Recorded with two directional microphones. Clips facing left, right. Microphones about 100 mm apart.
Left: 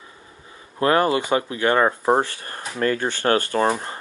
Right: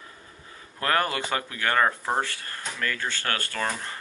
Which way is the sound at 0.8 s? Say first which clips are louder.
Left 7 dB; 25° left (ahead or behind).